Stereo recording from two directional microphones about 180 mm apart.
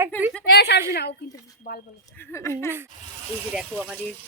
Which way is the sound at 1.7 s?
50° left (ahead or behind).